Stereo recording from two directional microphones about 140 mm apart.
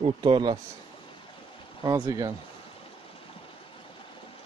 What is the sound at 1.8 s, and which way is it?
Speech, 25° right (ahead or behind).